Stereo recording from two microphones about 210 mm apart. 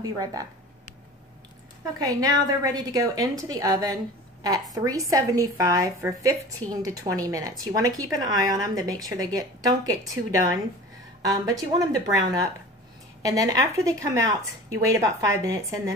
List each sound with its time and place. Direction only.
0.0 s a woman's voice: 15° right (ahead or behind)
2.0 s a woman's voice: 15° right (ahead or behind)